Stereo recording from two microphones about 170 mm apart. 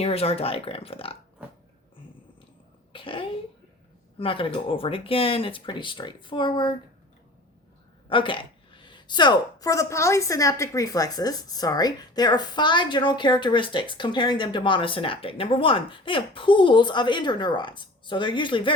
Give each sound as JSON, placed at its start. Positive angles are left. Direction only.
{"t": 0.0, "sound": "speech", "side_deg": 35}
{"t": 2.9, "sound": "speech", "side_deg": 30}
{"t": 8.1, "sound": "a woman's voice", "side_deg": 30}